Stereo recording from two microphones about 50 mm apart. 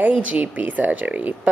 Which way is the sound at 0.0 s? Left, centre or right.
Right.